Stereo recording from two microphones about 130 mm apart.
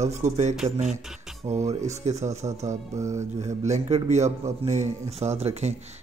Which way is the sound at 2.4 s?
30° right (ahead or behind).